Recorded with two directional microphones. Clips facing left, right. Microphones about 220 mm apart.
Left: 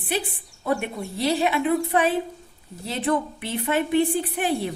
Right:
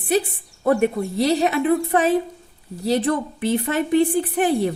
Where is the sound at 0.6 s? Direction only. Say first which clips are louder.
Right 8 dB; 45° right (ahead or behind).